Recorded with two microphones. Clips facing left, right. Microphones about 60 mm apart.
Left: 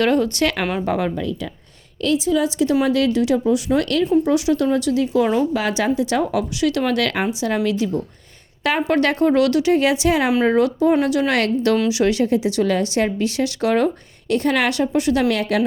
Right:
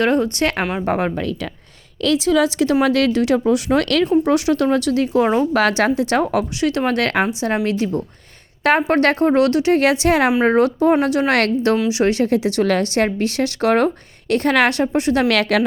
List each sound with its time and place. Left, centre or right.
0.0 s speech: right
0.6 s a woman's voice: centre
0.9 s speech: right
2.0 s speech: right
2.8 s speech: right
4.2 s speech: right
5.2 s speech: right
5.5 s a woman's voice: right
9.7 s a woman's voice: right
10.4 s speech: right
12.3 s a woman's voice: right
15.3 s a woman's voice: right